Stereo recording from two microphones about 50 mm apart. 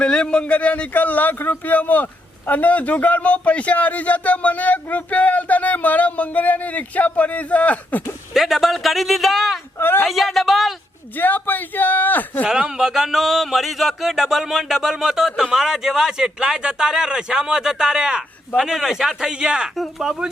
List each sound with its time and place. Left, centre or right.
0.0 s a man's voice: centre
8.3 s speech: centre
9.7 s speech: left
10.1 s speech: centre
11.2 s a man's voice: left
12.5 s speech: centre